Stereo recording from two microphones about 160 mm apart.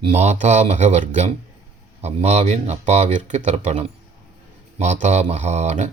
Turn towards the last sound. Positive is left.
turn(degrees=-45)  # may be behind; listen again after turning